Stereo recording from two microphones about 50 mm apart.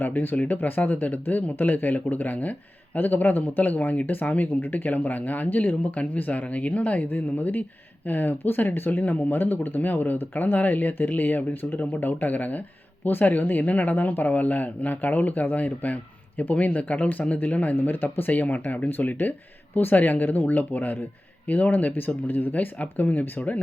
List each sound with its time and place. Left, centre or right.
0.0 s speech: left
17.7 s speech: left